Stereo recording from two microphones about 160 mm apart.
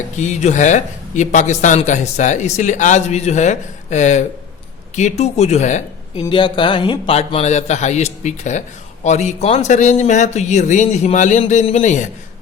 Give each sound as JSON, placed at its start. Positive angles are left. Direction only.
{"t": 0.2, "sound": "a man's voice", "side_deg": 45}
{"t": 6.2, "sound": "a man's voice", "side_deg": 30}